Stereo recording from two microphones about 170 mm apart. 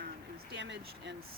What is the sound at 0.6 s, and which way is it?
Speech, 90° right.